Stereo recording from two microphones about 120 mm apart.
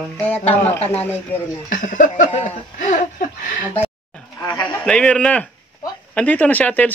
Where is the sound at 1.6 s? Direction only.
90° left.